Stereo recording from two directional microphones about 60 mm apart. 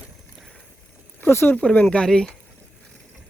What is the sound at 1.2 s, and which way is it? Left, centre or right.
Speech, left.